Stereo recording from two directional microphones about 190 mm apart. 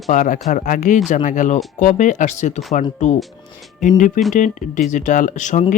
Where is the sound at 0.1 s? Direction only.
40° left (ahead or behind).